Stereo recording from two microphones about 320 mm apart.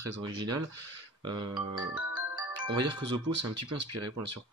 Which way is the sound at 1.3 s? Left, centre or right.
Centre.